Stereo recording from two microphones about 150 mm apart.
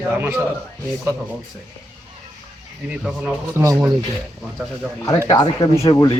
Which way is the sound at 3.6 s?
20° right (ahead or behind).